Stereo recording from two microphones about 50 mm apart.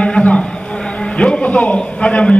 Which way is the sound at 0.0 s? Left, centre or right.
Left.